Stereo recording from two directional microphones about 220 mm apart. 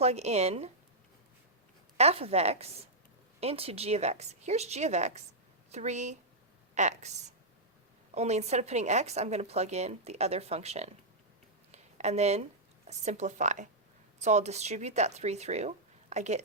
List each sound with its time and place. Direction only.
0.0 s a woman's voice: 30° right (ahead or behind)
2.0 s a woman's voice: 30° right (ahead or behind)
11.7 s a sound: 30° right (ahead or behind)
12.9 s speech: 30° right (ahead or behind)